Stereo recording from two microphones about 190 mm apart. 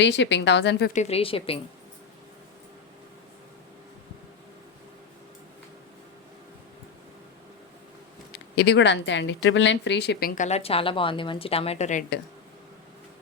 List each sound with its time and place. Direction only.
0.0 s speech: 70° left (ahead or behind)
0.9 s speech: 35° left (ahead or behind)
8.3 s a woman's voice: 60° left (ahead or behind); by 12.0 s 40° left (ahead or behind)